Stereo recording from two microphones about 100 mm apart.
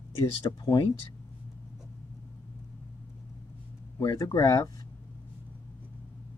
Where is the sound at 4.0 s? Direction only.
45° left (ahead or behind).